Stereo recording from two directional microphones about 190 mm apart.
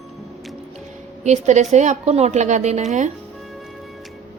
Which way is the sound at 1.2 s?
35° right (ahead or behind).